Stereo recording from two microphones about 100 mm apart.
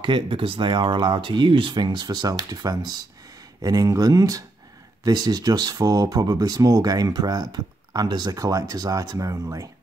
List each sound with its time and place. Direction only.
0.0 s speech: 55° right (ahead or behind); by 9.7 s 35° right (ahead or behind)